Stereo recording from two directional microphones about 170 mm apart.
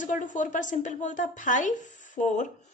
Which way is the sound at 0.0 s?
45° left (ahead or behind).